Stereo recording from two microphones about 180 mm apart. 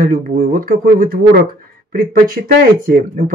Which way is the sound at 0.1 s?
50° right (ahead or behind).